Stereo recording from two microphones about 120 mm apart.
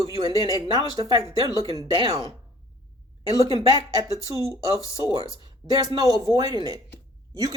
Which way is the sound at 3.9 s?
25° right (ahead or behind).